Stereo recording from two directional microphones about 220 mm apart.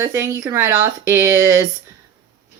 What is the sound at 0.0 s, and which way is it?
Speech, 10° right (ahead or behind).